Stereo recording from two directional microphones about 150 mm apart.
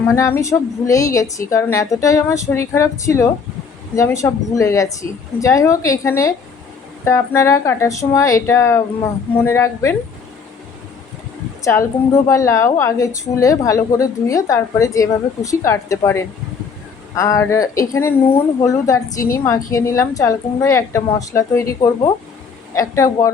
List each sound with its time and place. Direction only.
0.1 s a woman's voice: 20° left (ahead or behind)
11.6 s a woman's voice: 20° left (ahead or behind)